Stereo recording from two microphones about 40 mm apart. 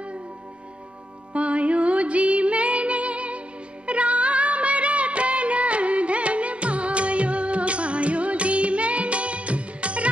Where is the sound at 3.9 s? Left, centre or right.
Right.